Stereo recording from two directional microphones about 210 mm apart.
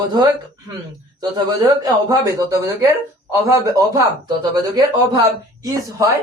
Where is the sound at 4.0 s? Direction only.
20° right (ahead or behind).